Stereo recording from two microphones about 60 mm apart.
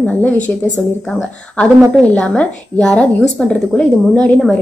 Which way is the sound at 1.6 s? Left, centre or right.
Centre.